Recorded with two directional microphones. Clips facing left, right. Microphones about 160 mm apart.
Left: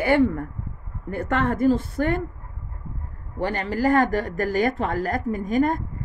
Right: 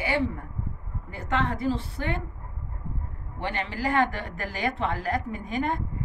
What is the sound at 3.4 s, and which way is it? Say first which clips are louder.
A woman's voice: left 7 dB; 45° left (ahead or behind).